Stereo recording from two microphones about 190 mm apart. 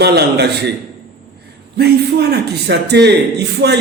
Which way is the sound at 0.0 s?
60° right (ahead or behind).